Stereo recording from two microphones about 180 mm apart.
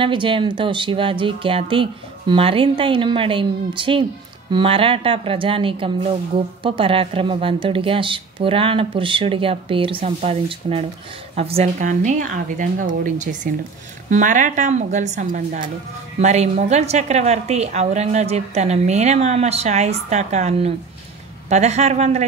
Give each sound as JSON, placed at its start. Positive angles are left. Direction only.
{"t": 0.0, "sound": "a woman's voice", "side_deg": -30}